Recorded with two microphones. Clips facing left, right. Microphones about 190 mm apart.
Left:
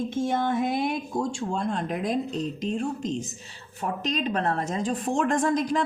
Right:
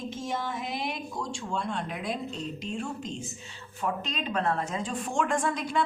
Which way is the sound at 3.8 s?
40° left (ahead or behind).